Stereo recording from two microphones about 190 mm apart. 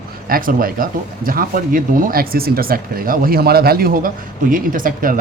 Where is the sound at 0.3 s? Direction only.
50° right (ahead or behind).